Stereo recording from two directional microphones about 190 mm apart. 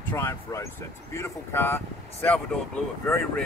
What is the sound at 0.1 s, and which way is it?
Speech, 15° left (ahead or behind).